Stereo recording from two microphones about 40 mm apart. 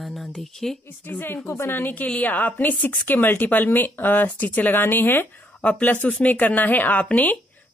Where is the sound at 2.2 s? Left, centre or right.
Left.